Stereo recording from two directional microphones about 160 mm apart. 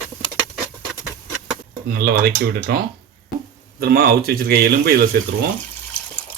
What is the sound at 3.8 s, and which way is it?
Speech, 70° right (ahead or behind).